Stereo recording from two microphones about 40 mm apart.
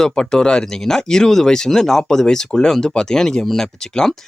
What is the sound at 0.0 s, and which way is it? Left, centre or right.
Speech, centre.